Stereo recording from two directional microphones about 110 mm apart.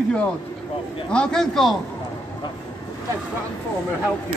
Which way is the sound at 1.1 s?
10° left (ahead or behind).